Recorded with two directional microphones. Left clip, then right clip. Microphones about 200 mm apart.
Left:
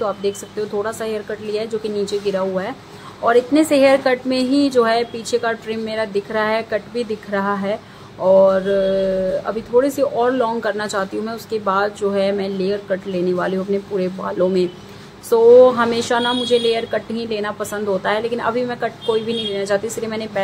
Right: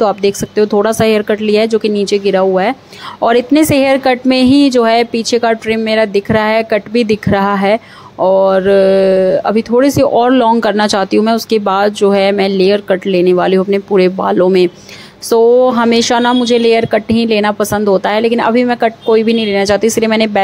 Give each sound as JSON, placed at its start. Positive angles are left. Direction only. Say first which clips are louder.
{"t": 0.0, "sound": "speech", "louder": "right 9 dB", "side_deg": -40}